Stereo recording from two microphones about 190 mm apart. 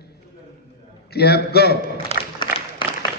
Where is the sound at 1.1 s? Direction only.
55° left (ahead or behind).